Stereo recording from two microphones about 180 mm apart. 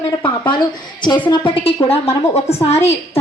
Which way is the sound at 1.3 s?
30° left (ahead or behind).